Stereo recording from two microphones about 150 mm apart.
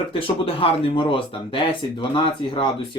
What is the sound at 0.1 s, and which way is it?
Speech, 40° left (ahead or behind).